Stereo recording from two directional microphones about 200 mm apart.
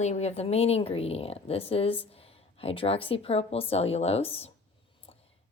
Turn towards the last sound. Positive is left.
turn(degrees=30)  # may be behind; listen again after turning